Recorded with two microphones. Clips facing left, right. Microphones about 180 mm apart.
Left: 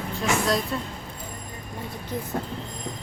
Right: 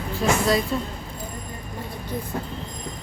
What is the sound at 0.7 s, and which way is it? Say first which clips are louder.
Speech: right 4 dB; 5° right (ahead or behind).